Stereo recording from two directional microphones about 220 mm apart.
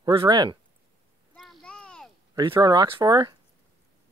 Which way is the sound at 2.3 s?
20° right (ahead or behind).